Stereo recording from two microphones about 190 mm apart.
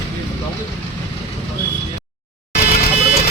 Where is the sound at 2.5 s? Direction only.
55° left (ahead or behind).